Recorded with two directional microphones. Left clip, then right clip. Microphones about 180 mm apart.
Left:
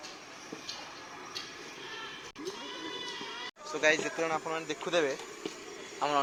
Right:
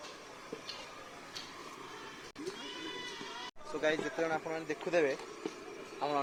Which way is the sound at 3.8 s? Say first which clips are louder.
Left 5 dB; centre (ahead or behind).